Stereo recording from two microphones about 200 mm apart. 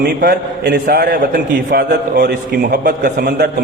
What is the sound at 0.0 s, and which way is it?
A man's voice, 50° right (ahead or behind).